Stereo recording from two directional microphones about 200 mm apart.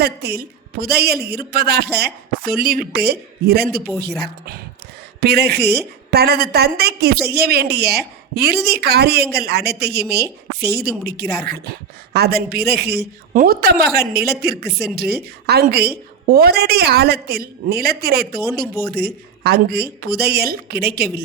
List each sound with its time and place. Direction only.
0.0 s a woman's voice: 55° right (ahead or behind)